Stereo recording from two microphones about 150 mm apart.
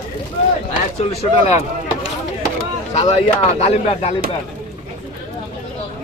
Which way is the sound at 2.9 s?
45° left (ahead or behind).